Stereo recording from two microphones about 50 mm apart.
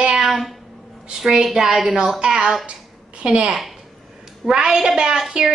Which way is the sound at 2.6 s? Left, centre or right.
Right.